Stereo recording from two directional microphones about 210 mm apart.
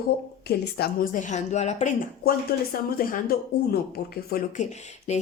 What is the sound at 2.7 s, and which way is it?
Speech, 45° left (ahead or behind).